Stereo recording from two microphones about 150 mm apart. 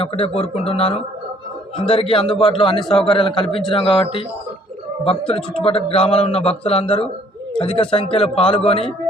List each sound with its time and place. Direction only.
0.0 s a man's voice: 40° left (ahead or behind)